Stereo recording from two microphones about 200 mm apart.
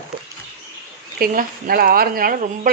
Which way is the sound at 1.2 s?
45° right (ahead or behind).